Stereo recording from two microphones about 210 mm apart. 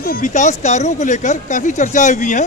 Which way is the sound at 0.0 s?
40° left (ahead or behind).